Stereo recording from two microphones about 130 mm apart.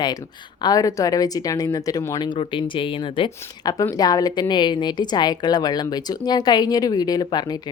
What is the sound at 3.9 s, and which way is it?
A woman's voice, 30° left (ahead or behind).